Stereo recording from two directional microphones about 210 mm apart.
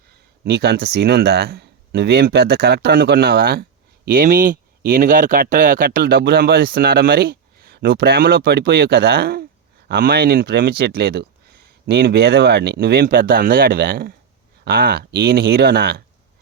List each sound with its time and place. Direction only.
0.4 s speech: 50° right (ahead or behind)